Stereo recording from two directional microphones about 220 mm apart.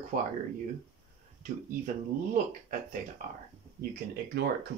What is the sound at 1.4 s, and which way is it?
Speech, 35° right (ahead or behind).